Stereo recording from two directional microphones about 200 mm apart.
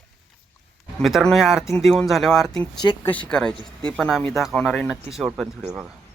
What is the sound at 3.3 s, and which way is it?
Speech, 5° left (ahead or behind).